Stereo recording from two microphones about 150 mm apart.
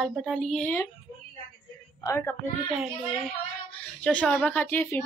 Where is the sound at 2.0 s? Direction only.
15° left (ahead or behind).